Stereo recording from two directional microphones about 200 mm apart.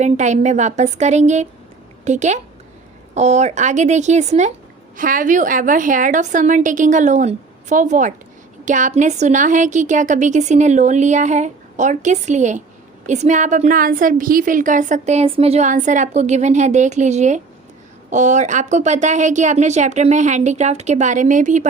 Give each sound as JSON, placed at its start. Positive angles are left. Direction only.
{"t": 0.0, "sound": "a woman's voice", "side_deg": -35}